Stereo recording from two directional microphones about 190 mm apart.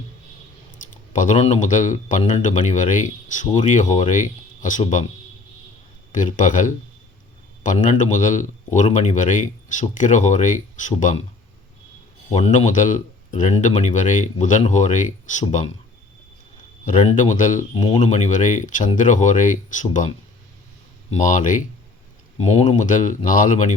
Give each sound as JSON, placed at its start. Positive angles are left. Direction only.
{"t": 1.1, "sound": "speech", "side_deg": 40}
{"t": 6.1, "sound": "speech", "side_deg": 40}
{"t": 7.8, "sound": "speech", "side_deg": 40}
{"t": 12.3, "sound": "speech", "side_deg": 40}
{"t": 16.8, "sound": "speech", "side_deg": 40}
{"t": 17.7, "sound": "speech", "side_deg": 30}